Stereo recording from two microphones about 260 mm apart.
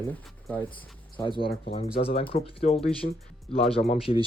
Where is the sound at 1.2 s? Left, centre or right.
Centre.